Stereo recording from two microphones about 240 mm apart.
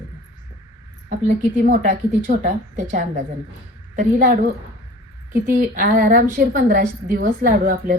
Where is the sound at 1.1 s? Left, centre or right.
Right.